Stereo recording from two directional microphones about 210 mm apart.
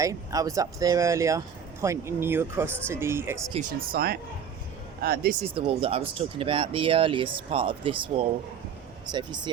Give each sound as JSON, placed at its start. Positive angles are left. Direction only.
{"t": 0.0, "sound": "speech", "side_deg": -15}
{"t": 3.5, "sound": "speech", "side_deg": -40}
{"t": 5.4, "sound": "speech", "side_deg": -25}